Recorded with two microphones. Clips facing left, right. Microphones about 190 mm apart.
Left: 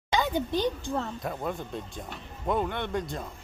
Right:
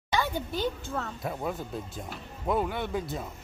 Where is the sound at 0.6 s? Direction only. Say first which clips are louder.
Left 3 dB; 15° left (ahead or behind).